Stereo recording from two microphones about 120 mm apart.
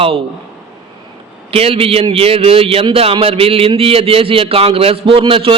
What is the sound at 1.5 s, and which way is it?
A man's voice, 55° right (ahead or behind).